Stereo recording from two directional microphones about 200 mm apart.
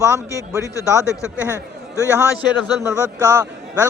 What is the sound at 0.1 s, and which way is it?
Speech, 15° right (ahead or behind).